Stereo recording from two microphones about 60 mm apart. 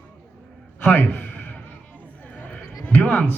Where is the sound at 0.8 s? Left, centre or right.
Left.